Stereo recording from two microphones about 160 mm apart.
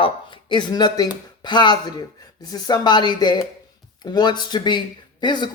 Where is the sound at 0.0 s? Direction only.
30° left (ahead or behind).